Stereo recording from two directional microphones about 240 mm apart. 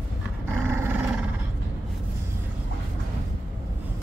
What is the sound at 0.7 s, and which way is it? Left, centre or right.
Dog, centre.